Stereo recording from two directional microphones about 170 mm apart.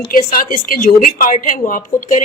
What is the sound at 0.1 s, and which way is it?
A woman's voice, 55° left (ahead or behind).